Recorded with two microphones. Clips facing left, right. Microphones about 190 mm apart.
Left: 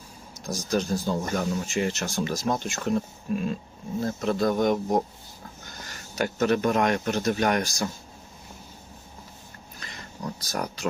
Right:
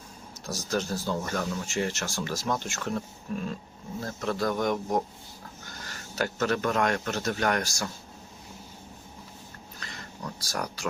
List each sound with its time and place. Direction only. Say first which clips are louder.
0.4 s speech: left 4 dB; 15° left (ahead or behind)
6.1 s speech: left 4 dB; 20° left (ahead or behind)
10.4 s speech: left 1 dB; 20° left (ahead or behind)